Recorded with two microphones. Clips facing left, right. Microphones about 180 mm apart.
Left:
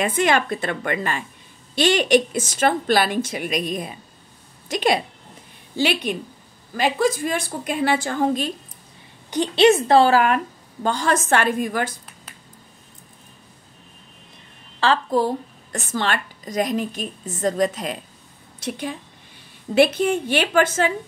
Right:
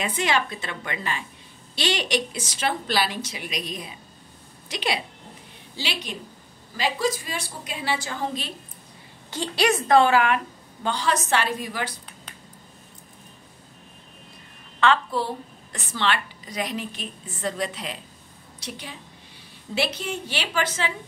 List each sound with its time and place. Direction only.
0.0 s a woman's voice: 50° left (ahead or behind)
9.3 s a woman's voice: 20° left (ahead or behind); by 11.9 s 50° left (ahead or behind)
14.8 s a woman's voice: 40° left (ahead or behind)